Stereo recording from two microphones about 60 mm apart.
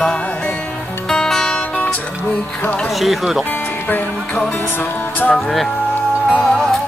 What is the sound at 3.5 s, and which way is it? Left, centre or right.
Music, left.